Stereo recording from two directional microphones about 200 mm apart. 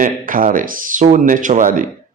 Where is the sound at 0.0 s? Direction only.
45° right (ahead or behind).